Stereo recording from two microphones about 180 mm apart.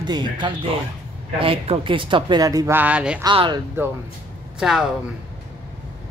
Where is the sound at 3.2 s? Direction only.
25° right (ahead or behind).